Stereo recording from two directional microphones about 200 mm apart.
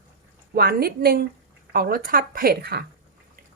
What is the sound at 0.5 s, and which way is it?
Speech, 50° right (ahead or behind).